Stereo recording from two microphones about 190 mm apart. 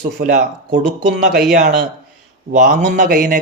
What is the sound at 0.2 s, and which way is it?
Speech, 45° right (ahead or behind).